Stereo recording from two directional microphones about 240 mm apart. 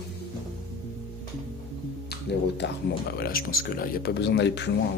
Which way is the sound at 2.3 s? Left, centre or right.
Left.